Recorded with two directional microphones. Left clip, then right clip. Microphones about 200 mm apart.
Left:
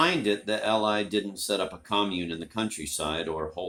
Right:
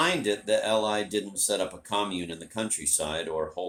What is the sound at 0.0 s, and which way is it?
Speech, 35° left (ahead or behind).